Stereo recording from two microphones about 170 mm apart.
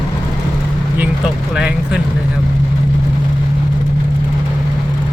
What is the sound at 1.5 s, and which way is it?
Vehicle, 5° right (ahead or behind).